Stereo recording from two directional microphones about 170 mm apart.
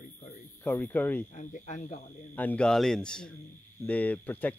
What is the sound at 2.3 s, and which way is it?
Speech, 10° left (ahead or behind).